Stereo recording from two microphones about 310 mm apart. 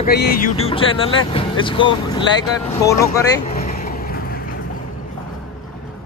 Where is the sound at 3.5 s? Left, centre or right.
Left.